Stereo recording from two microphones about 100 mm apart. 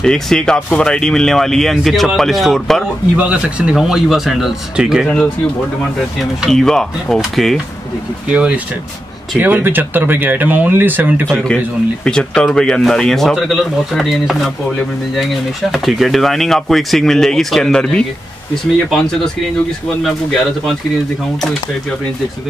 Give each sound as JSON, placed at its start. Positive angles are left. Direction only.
{"t": 0.0, "sound": "speech", "side_deg": 5}
{"t": 3.2, "sound": "speech", "side_deg": -10}
{"t": 5.0, "sound": "a man's voice", "side_deg": 10}
{"t": 6.4, "sound": "speech", "side_deg": 5}
{"t": 8.3, "sound": "speech", "side_deg": -15}
{"t": 11.2, "sound": "a man's voice", "side_deg": 10}
{"t": 15.7, "sound": "speech", "side_deg": 0}